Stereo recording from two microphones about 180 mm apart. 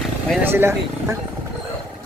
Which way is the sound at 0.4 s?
10° right (ahead or behind).